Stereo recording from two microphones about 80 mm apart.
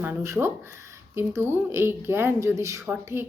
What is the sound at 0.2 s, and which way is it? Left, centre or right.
A woman's voice, right.